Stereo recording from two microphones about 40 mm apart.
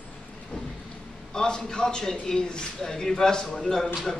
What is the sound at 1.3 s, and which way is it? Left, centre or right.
Speech, centre.